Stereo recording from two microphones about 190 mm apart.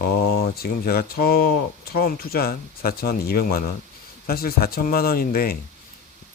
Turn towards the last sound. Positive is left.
turn(degrees=50)  # may be behind; listen again after turning